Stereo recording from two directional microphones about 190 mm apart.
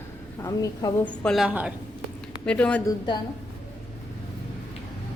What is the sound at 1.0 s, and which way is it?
Speech, 5° left (ahead or behind).